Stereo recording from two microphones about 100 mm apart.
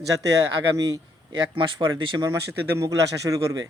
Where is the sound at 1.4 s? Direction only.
55° right (ahead or behind).